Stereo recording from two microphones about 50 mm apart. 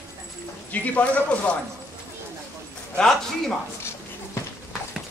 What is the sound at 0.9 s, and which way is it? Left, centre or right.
Speech, left.